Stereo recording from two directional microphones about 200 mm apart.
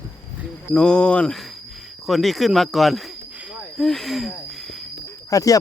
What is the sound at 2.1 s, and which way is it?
Snake, centre (ahead or behind).